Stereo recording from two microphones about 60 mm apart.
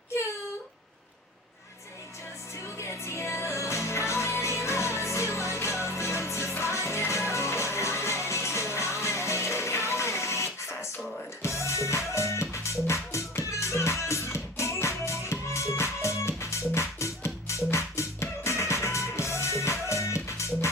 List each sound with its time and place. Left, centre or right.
2.7 s music: left